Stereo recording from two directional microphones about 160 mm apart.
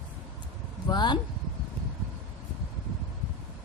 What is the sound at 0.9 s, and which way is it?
Speech, 30° left (ahead or behind).